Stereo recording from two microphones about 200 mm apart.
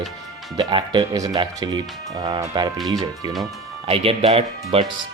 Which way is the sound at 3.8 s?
30° right (ahead or behind).